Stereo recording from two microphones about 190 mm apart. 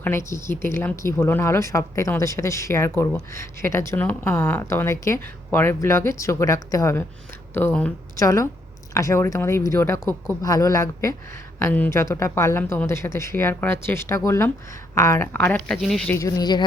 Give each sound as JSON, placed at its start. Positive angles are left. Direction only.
{"t": 0.0, "sound": "speech", "side_deg": 15}
{"t": 16.1, "sound": "speech", "side_deg": 20}